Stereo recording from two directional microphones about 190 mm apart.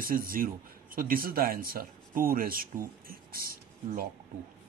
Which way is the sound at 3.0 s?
50° right (ahead or behind).